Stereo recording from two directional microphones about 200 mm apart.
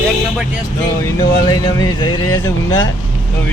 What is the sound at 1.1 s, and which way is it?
Speech, 20° left (ahead or behind).